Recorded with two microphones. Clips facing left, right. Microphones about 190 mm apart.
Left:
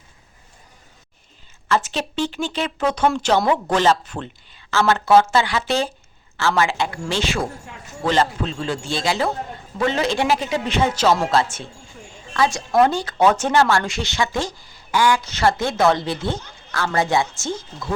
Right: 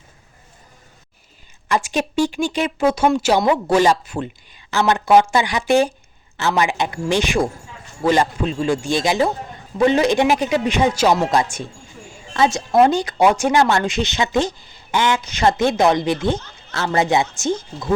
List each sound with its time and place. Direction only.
1.6 s speech: 15° right (ahead or behind)